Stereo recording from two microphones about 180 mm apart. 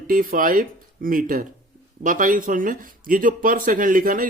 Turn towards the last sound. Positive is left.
turn(degrees=-50)  # may be behind; listen again after turning